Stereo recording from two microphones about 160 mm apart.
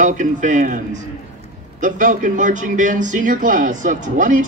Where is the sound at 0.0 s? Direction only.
50° right (ahead or behind).